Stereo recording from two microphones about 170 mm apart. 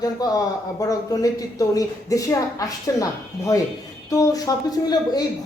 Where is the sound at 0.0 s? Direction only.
20° left (ahead or behind).